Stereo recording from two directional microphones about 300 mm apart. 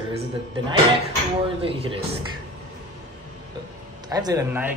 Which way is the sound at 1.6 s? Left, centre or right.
Centre.